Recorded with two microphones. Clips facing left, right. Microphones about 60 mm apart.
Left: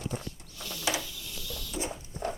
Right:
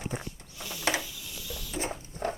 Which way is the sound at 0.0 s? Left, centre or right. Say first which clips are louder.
Even; right.